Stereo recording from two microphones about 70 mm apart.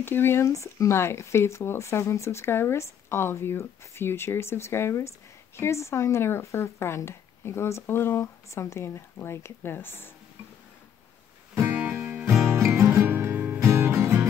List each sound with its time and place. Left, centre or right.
0.0 s speech: left
11.9 s music: right
12.5 s music: right
13.6 s music: right